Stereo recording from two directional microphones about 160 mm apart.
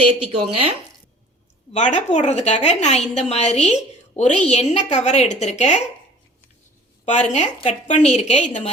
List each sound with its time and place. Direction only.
0.3 s speech: 35° right (ahead or behind)
1.7 s a woman's voice: 50° left (ahead or behind)
7.0 s a woman's voice: 45° left (ahead or behind)